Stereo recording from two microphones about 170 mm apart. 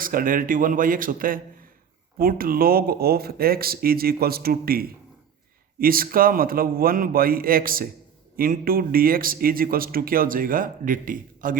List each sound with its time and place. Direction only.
0.0 s a man's voice: 55° right (ahead or behind)